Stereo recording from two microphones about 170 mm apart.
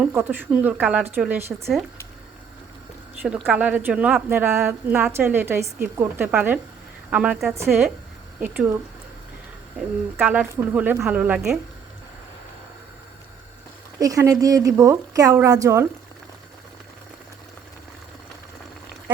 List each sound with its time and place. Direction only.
0.0 s a woman's voice: 15° right (ahead or behind)
1.5 s a woman's voice: centre (ahead or behind)
3.3 s a woman's voice: centre (ahead or behind)
3.6 s a woman's voice: 10° right (ahead or behind)
10.2 s a woman's voice: 10° right (ahead or behind)
14.0 s a woman's voice: 20° right (ahead or behind)